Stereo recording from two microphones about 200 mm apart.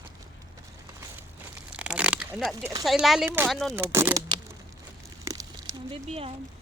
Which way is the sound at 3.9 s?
15° right (ahead or behind).